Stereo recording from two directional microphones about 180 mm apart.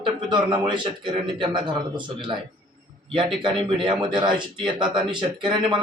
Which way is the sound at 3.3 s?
25° right (ahead or behind).